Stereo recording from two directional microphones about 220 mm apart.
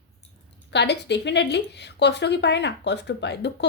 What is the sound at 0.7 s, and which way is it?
Speech, 50° left (ahead or behind).